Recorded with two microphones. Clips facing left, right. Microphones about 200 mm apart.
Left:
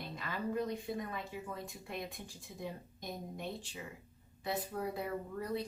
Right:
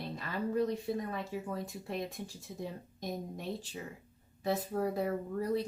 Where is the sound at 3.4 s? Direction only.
35° right (ahead or behind).